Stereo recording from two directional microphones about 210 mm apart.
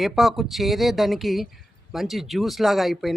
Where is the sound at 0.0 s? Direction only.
Centre (ahead or behind).